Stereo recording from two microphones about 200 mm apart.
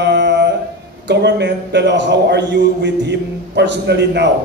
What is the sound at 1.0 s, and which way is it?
A man's voice, 60° right (ahead or behind).